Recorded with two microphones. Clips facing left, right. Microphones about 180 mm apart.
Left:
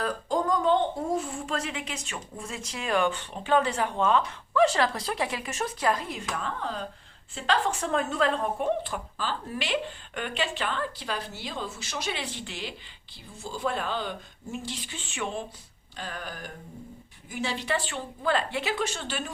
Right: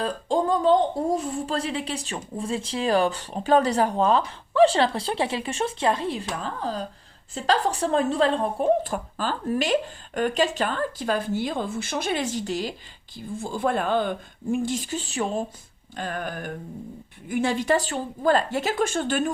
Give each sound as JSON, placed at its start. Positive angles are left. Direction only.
{"t": 0.0, "sound": "speech", "side_deg": -30}
{"t": 13.1, "sound": "speech", "side_deg": -50}
{"t": 16.0, "sound": "speech", "side_deg": -50}